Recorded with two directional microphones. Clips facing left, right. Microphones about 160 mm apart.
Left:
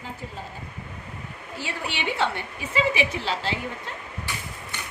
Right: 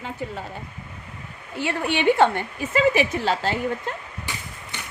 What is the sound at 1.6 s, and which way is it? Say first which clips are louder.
A woman's voice: right 10 dB; 55° right (ahead or behind).